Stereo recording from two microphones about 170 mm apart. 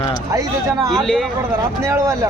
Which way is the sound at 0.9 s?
Centre (ahead or behind).